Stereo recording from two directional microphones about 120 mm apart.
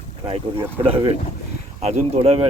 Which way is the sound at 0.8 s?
55° right (ahead or behind).